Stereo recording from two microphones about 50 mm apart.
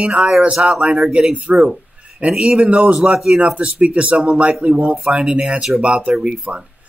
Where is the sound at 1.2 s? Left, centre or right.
Right.